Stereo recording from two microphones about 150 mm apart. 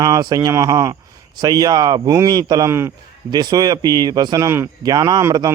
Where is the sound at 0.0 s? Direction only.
25° right (ahead or behind).